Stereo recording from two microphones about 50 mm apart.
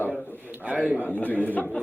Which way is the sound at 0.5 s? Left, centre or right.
Right.